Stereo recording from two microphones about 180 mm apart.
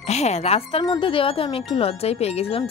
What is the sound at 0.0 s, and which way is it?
Speech, 35° left (ahead or behind).